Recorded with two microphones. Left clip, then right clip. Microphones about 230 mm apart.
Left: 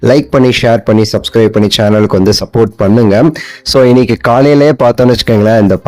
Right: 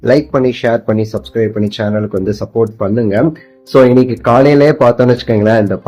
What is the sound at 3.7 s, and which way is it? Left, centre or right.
Speech, left.